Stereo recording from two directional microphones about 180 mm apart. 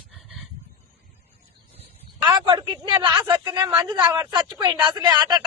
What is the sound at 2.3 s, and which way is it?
Speech, 25° right (ahead or behind).